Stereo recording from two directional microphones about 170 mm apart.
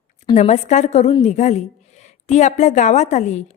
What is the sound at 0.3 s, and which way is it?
A woman's voice, 45° left (ahead or behind).